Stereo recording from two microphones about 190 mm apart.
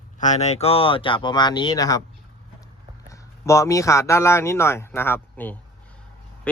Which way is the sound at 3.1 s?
15° left (ahead or behind).